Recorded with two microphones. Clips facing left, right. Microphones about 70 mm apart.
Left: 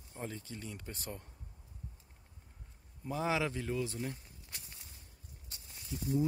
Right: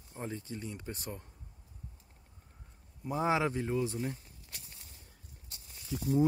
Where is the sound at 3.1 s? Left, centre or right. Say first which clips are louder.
Right 4 dB; right.